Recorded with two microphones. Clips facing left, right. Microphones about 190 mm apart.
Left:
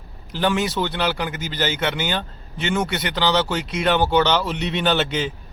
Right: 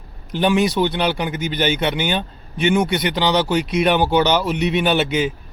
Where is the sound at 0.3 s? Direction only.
15° right (ahead or behind).